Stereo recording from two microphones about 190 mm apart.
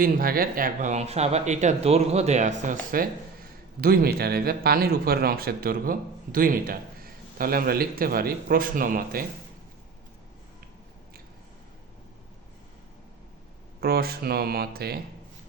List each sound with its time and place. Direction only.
0.0 s speech: 50° right (ahead or behind)
3.8 s a man's voice: 55° right (ahead or behind)
13.8 s speech: 55° right (ahead or behind)